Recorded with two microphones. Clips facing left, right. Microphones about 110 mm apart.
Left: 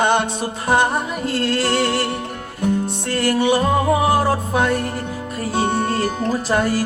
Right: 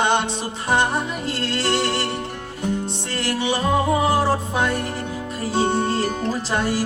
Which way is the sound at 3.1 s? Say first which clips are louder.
Left 6 dB; 50° left (ahead or behind).